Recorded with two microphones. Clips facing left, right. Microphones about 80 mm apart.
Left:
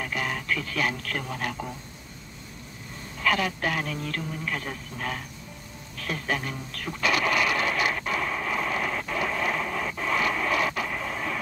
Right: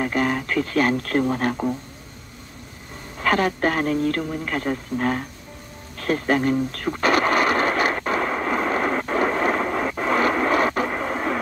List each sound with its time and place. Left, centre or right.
0.0 s speech: right
3.2 s speech: right
5.9 s artillery fire: right